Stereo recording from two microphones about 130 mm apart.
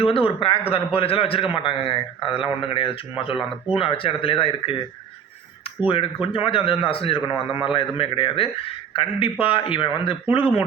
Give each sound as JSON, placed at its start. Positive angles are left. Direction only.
{"t": 0.0, "sound": "a man's voice", "side_deg": 45}
{"t": 6.2, "sound": "a man's voice", "side_deg": 45}